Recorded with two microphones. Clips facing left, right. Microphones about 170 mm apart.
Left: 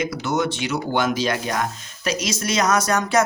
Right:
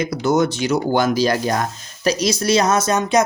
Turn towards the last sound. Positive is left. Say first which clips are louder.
# right 3 dB
turn(degrees=-20)  # may be behind; listen again after turning